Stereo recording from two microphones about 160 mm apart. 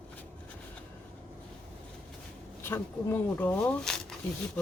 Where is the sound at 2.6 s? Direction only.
15° left (ahead or behind).